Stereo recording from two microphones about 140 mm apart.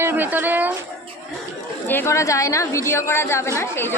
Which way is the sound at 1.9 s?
20° left (ahead or behind).